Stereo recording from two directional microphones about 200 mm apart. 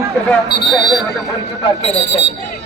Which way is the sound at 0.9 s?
Centre (ahead or behind).